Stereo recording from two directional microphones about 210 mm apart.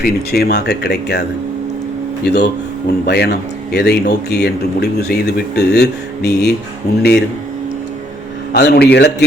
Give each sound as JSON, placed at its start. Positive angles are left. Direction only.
{"t": 0.0, "sound": "a man's voice", "side_deg": 50}
{"t": 2.2, "sound": "a man's voice", "side_deg": 50}
{"t": 8.5, "sound": "a man's voice", "side_deg": 50}